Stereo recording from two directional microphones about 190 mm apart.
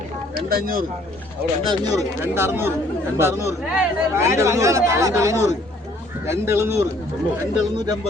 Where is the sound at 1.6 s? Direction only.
25° right (ahead or behind).